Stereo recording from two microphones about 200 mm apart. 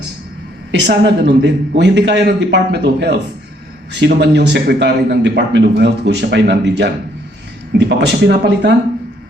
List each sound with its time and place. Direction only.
0.7 s a man's voice: 60° right (ahead or behind)